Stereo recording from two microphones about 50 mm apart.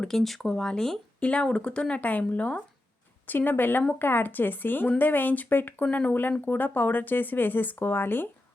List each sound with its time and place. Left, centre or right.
0.0 s speech: centre
1.2 s speech: left